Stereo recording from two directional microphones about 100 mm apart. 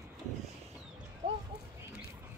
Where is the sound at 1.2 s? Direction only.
65° right (ahead or behind).